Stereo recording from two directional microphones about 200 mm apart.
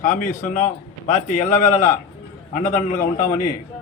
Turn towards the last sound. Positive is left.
turn(degrees=40)  # may be behind; listen again after turning